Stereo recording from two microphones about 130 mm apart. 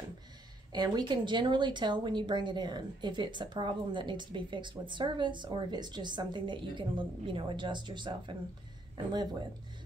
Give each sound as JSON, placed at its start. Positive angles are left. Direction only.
{"t": 0.7, "sound": "speech", "side_deg": -30}